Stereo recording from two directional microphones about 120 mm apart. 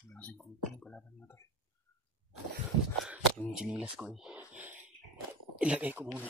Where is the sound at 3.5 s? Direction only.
10° right (ahead or behind).